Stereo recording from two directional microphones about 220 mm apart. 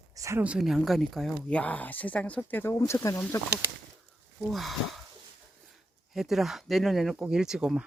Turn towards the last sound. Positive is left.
turn(degrees=-5)  # may be behind; listen again after turning